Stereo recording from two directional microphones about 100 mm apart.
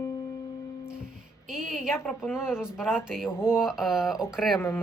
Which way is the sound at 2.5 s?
5° right (ahead or behind).